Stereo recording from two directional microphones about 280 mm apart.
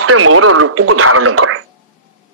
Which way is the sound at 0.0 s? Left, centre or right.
Right.